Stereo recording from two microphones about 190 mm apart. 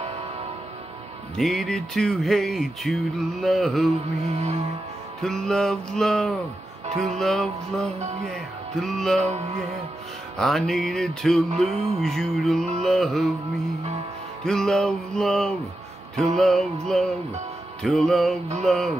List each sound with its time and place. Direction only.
1.3 s music: centre (ahead or behind)
4.2 s music: 35° right (ahead or behind)
5.2 s music: centre (ahead or behind)
9.2 s music: 35° right (ahead or behind)
10.3 s music: centre (ahead or behind)
14.4 s music: 5° left (ahead or behind)